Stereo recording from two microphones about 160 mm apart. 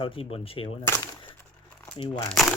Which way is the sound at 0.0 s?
35° left (ahead or behind).